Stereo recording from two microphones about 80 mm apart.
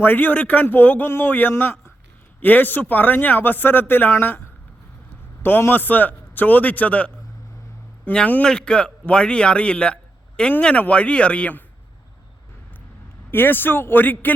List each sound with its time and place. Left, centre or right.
0.0 s speech: left
8.1 s a man's voice: centre
13.3 s speech: left